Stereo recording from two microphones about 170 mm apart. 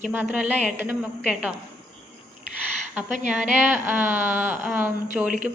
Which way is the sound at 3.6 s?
10° right (ahead or behind).